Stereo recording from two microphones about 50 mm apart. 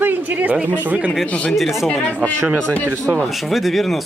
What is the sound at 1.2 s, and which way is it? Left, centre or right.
Speech, left.